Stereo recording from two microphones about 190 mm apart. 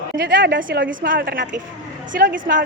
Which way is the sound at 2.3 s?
45° right (ahead or behind).